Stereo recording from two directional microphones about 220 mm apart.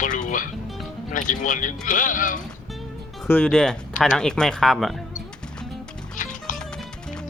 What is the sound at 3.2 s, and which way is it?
Speech, 5° left (ahead or behind).